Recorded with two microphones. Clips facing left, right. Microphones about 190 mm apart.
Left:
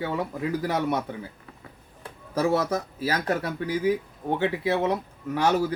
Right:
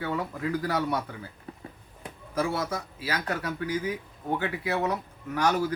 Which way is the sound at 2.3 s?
35° left (ahead or behind).